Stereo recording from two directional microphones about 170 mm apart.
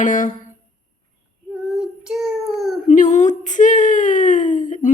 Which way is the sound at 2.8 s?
45° left (ahead or behind).